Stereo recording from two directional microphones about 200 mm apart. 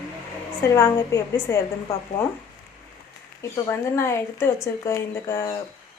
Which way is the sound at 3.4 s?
15° left (ahead or behind).